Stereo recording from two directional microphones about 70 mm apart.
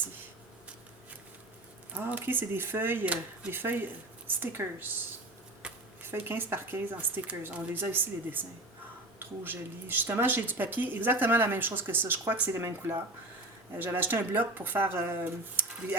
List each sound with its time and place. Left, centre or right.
1.9 s speech: right
5.6 s a sound: centre
6.0 s speech: right